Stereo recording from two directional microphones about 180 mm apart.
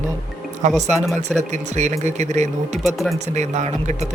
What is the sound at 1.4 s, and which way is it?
Speech, 40° right (ahead or behind).